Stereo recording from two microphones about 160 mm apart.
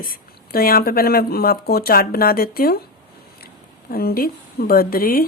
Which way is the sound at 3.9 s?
70° left (ahead or behind).